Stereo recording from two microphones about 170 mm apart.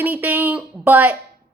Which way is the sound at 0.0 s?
10° right (ahead or behind).